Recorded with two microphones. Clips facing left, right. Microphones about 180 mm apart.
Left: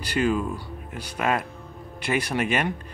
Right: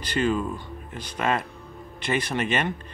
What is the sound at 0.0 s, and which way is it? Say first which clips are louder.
Speech: left 1 dB; 10° left (ahead or behind).